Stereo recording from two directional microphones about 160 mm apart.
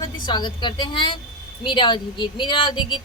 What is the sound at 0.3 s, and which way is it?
A woman's voice, 25° left (ahead or behind).